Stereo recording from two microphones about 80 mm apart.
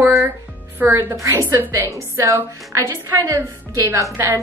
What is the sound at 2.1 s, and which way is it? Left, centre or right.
A woman's voice, right.